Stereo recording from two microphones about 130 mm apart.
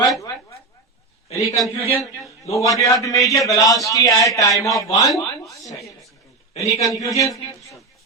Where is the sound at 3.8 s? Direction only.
25° left (ahead or behind).